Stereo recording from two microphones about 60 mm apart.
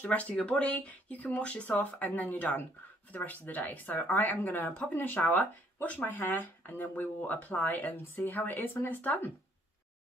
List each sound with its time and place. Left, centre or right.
0.0 s speech: left